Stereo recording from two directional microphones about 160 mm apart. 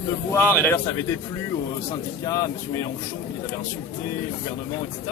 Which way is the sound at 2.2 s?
20° left (ahead or behind).